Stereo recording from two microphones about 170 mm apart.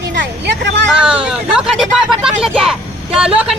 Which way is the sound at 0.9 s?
5° right (ahead or behind).